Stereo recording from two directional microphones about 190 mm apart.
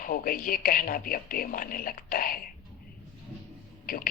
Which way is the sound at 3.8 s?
50° left (ahead or behind).